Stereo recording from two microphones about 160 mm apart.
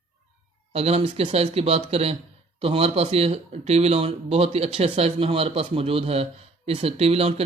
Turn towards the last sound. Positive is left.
turn(degrees=-40)  # may be behind; listen again after turning